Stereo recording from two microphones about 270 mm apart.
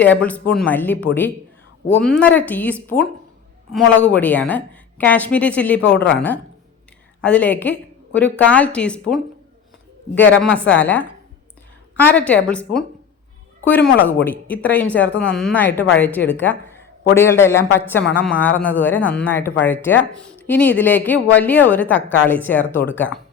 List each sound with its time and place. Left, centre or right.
0.0 s a woman's voice: centre
10.4 s a woman's voice: centre